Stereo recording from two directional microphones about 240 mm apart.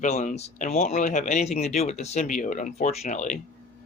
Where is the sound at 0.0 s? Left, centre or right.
Left.